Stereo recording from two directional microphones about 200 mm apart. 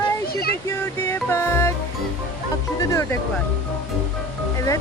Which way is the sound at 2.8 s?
15° left (ahead or behind).